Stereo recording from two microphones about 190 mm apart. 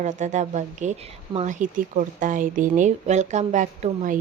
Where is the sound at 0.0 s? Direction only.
40° right (ahead or behind).